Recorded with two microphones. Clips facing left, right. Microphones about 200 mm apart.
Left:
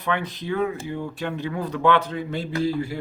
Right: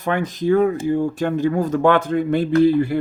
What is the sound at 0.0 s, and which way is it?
Speech, 45° right (ahead or behind).